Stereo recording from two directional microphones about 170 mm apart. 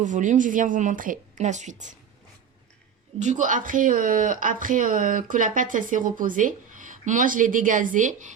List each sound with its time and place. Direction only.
0.0 s a woman's voice: 45° right (ahead or behind)
3.2 s a woman's voice: 45° right (ahead or behind)